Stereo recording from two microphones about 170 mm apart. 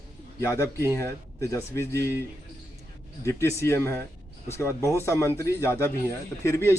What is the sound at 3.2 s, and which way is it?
Speech, 15° left (ahead or behind).